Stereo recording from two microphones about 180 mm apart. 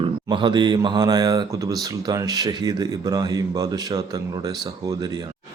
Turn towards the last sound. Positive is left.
turn(degrees=-20)  # may be behind; listen again after turning